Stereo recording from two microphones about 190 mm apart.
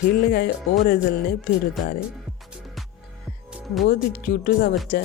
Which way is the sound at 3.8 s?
50° left (ahead or behind).